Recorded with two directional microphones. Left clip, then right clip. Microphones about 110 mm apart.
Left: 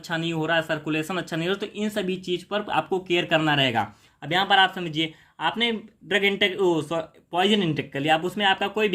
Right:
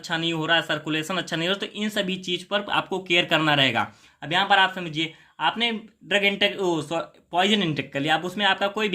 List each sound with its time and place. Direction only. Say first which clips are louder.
0.0 s speech: right 1 dB; 25° left (ahead or behind)
4.3 s speech: even; 40° left (ahead or behind)